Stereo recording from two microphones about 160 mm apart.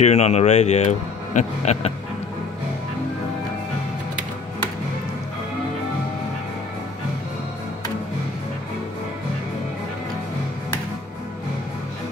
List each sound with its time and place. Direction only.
0.0 s speech: 45° left (ahead or behind)